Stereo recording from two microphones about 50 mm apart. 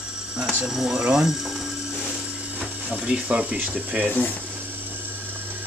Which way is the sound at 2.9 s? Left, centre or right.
Right.